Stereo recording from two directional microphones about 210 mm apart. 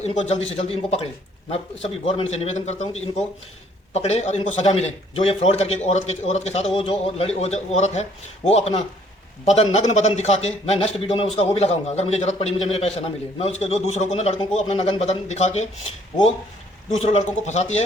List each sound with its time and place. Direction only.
0.0 s a man's voice: 30° left (ahead or behind)
2.3 s a man's voice: 30° left (ahead or behind)
16.9 s a man's voice: 30° left (ahead or behind)